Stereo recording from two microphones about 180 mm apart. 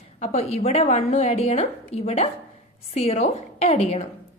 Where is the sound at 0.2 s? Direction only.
35° left (ahead or behind).